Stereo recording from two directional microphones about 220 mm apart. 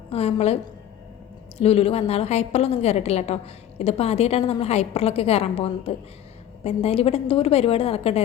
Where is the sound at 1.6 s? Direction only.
25° left (ahead or behind).